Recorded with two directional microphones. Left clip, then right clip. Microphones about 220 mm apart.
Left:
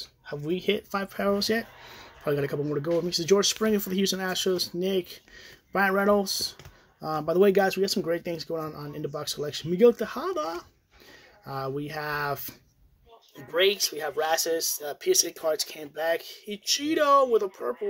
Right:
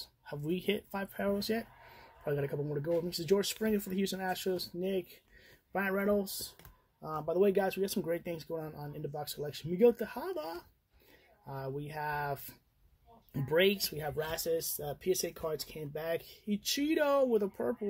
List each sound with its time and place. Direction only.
0.0 s speech: 10° right (ahead or behind); by 6.4 s 5° left (ahead or behind)
7.0 s speech: 35° left (ahead or behind)
7.2 s speech: 15° left (ahead or behind)
11.6 s speech: 5° left (ahead or behind)
13.6 s speech: 5° left (ahead or behind)